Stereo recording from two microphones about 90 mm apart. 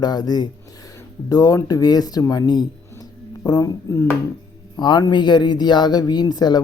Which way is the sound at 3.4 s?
40° left (ahead or behind).